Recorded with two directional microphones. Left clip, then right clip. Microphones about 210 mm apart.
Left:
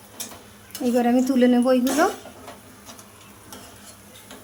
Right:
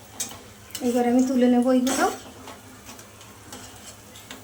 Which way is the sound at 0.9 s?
50° left (ahead or behind).